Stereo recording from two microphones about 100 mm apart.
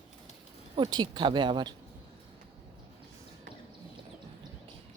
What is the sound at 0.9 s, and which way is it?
Speech, 50° right (ahead or behind).